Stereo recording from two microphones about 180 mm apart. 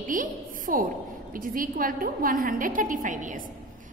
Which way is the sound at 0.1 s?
50° right (ahead or behind).